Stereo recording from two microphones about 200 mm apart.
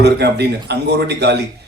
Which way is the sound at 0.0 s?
55° right (ahead or behind).